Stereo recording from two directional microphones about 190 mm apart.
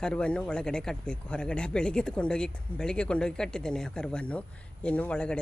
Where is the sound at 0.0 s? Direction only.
5° left (ahead or behind).